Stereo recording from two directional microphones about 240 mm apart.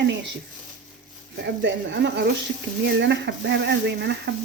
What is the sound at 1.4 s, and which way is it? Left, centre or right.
Speech, right.